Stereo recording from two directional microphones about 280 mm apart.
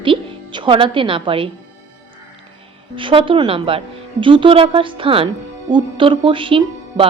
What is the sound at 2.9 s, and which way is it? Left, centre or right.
A woman's voice, centre.